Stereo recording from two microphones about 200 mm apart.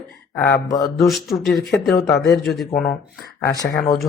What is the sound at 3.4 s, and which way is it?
Speech, 15° left (ahead or behind).